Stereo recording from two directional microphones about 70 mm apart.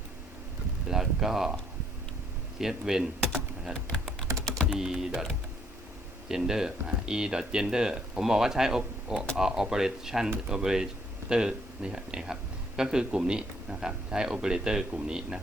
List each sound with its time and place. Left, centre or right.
0.9 s speech: centre
2.6 s speech: centre
4.3 s typing: right
4.7 s speech: centre